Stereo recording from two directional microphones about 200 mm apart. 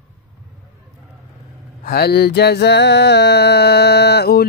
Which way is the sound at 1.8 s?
50° left (ahead or behind).